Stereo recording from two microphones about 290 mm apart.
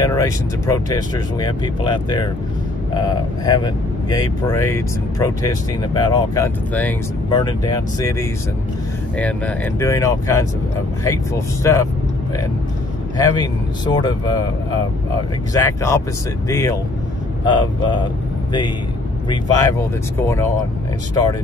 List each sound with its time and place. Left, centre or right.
0.0 s speech: centre
9.8 s speech: centre
13.2 s speech: centre
15.5 s speech: centre
20.2 s speech: centre